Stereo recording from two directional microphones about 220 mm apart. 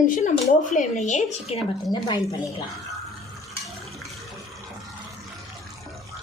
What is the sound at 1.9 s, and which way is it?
Speech, 20° left (ahead or behind).